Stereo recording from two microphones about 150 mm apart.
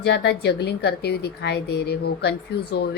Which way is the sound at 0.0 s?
90° left.